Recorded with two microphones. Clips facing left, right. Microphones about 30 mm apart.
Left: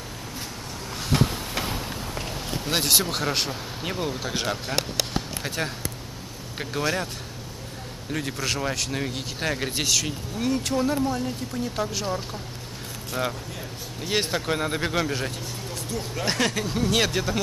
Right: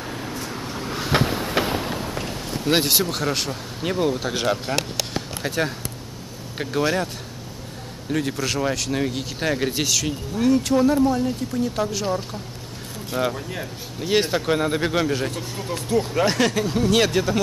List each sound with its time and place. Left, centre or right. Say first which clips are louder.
0.3 s vehicle: right 6 dB; right
1.1 s train: right 4 dB; right
2.1 s vehicle: right 3 dB; centre
2.9 s speech: right 2 dB; centre
3.8 s speech: right 7 dB; centre
5.1 s a sound: right 4 dB; centre
6.6 s speech: right 4 dB; centre
8.1 s speech: right 4 dB; centre
15.7 s speech: right 11 dB; centre
16.3 s speech: right 4 dB; centre